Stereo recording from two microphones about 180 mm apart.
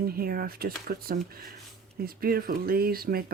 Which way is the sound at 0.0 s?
55° right (ahead or behind).